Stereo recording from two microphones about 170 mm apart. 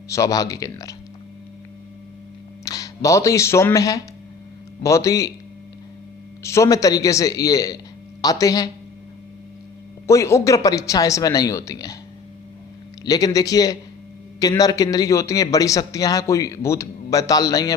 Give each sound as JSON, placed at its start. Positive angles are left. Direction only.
{"t": 0.1, "sound": "a man's voice", "side_deg": 20}
{"t": 2.6, "sound": "speech", "side_deg": 20}
{"t": 6.4, "sound": "a man's voice", "side_deg": 15}
{"t": 10.1, "sound": "a man's voice", "side_deg": 15}
{"t": 13.1, "sound": "a man's voice", "side_deg": 20}